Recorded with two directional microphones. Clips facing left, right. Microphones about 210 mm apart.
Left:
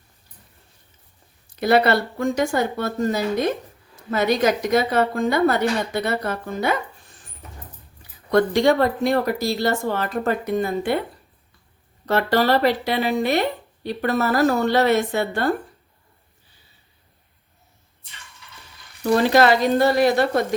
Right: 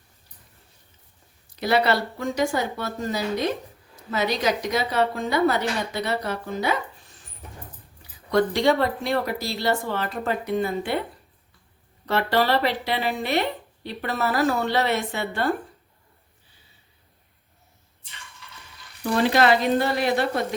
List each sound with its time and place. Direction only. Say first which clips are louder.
1.5 s a woman's voice: left 4 dB; 55° left (ahead or behind)
8.3 s a woman's voice: left 3 dB; 50° left (ahead or behind)
12.0 s a woman's voice: left 3 dB; 45° left (ahead or behind)
19.3 s a woman's voice: left 2 dB; 40° left (ahead or behind)